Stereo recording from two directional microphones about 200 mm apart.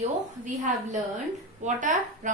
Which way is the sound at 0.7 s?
40° right (ahead or behind).